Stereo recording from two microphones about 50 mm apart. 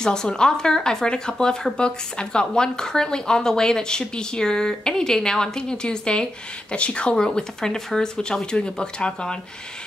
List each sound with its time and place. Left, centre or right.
0.0 s speech: centre